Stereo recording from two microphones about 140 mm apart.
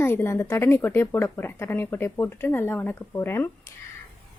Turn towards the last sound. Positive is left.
turn(degrees=15)  # may be behind; listen again after turning